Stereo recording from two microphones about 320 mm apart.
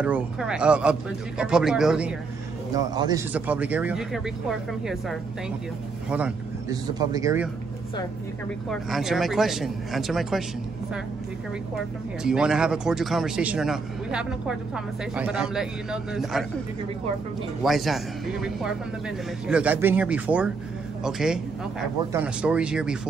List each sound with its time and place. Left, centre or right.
0.0 s a man's voice: centre
8.6 s a man's voice: centre
12.2 s a man's voice: centre
17.6 s a man's voice: centre